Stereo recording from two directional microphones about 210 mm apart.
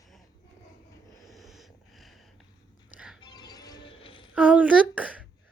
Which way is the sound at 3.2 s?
20° left (ahead or behind).